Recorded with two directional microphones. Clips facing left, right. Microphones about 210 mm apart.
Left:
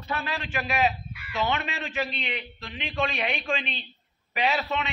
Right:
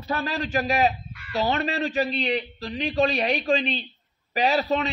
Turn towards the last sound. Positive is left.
turn(degrees=-35)  # may be behind; listen again after turning